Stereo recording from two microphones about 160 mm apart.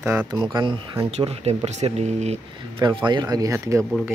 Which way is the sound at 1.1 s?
40° right (ahead or behind).